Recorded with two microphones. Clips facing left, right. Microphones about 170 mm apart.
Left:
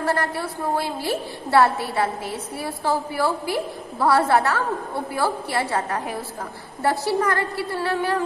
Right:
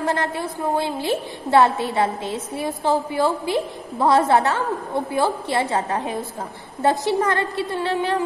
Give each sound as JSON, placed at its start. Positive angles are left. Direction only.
{"t": 0.0, "sound": "a woman's voice", "side_deg": -20}